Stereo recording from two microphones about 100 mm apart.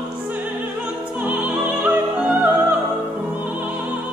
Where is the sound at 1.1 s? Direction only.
15° right (ahead or behind).